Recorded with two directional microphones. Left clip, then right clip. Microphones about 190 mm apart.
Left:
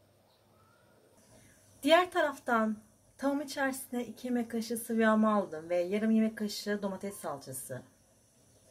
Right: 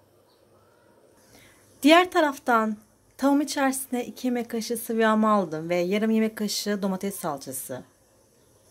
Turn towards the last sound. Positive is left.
turn(degrees=-50)  # may be behind; listen again after turning